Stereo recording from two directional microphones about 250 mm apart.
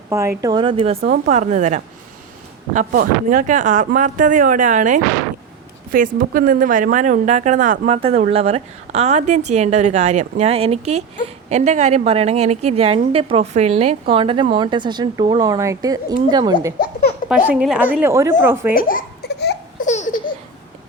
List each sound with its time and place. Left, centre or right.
0.1 s speech: centre; by 4.9 s right
6.1 s speech: right; by 16.7 s centre
17.2 s speech: centre
18.7 s a sound: left
19.9 s laughter: left